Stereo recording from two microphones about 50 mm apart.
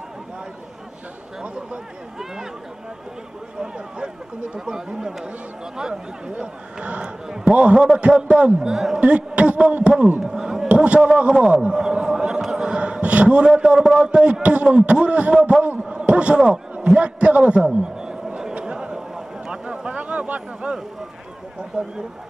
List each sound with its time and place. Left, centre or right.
1.4 s chatter: right
4.6 s a man's voice: centre
9.0 s a man's voice: right
10.2 s a sound: centre
10.7 s a man's voice: right
11.7 s a sound: centre
12.7 s a man's voice: right
17.6 s a sound: centre
21.5 s speech: centre